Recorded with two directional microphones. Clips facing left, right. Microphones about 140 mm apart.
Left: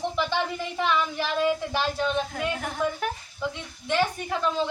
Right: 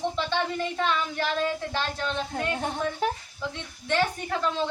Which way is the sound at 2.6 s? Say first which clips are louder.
Even; 30° right (ahead or behind).